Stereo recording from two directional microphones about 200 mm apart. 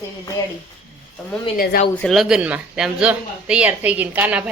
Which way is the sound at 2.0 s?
Centre (ahead or behind).